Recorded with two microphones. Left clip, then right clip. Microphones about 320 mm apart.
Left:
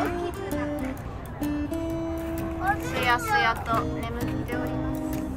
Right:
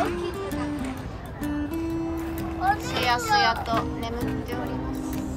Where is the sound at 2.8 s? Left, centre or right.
Centre.